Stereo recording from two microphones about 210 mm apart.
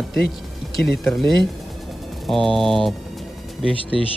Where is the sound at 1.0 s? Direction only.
Centre (ahead or behind).